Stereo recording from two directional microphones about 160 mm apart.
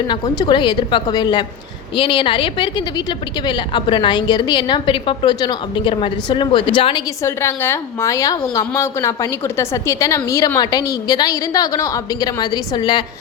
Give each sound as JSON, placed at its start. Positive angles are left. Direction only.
{"t": 0.1, "sound": "a woman's voice", "side_deg": 30}
{"t": 7.2, "sound": "a woman's voice", "side_deg": 15}